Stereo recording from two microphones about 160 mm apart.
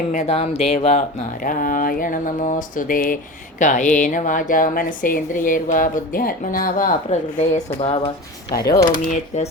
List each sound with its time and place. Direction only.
0.1 s speech: 45° left (ahead or behind)
1.4 s speech: 60° left (ahead or behind); by 9.5 s 45° left (ahead or behind)